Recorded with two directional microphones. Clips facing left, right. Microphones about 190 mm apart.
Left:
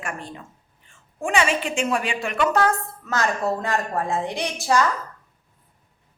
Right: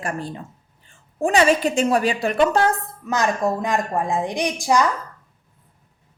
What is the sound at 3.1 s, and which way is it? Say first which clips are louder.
A woman's voice: right 3 dB; 15° right (ahead or behind).